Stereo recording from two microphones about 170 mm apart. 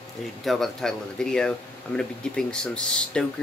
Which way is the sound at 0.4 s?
Centre (ahead or behind).